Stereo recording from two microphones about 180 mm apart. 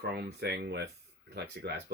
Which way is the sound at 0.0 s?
65° right (ahead or behind).